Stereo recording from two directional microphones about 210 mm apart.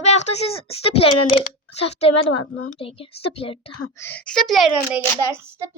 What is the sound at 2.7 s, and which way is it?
A woman's voice, 25° left (ahead or behind).